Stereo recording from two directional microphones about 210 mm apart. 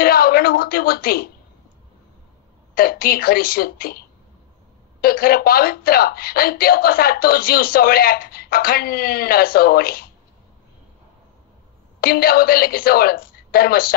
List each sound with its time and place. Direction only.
0.0 s a woman's voice: 45° left (ahead or behind)
2.7 s speech: 45° left (ahead or behind)
5.0 s speech: 45° left (ahead or behind)
12.0 s speech: 45° left (ahead or behind)